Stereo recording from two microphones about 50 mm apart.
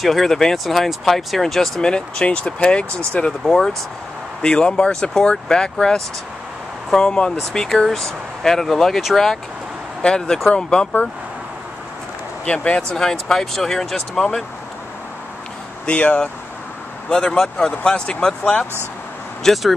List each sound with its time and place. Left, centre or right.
0.0 s speech: centre
1.8 s speech: centre
3.4 s speech: centre
12.5 s speech: left
15.9 s speech: left
19.4 s speech: centre